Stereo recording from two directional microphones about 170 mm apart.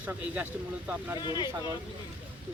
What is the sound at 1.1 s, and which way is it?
Speech, 25° left (ahead or behind).